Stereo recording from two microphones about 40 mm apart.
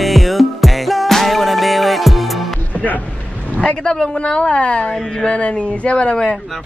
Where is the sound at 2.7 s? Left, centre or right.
Left.